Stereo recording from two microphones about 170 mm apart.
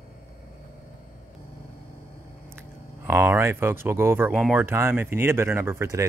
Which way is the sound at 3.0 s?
15° right (ahead or behind).